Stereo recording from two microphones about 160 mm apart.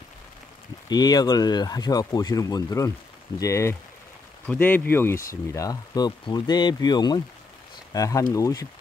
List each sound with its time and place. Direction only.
0.8 s speech: 25° left (ahead or behind)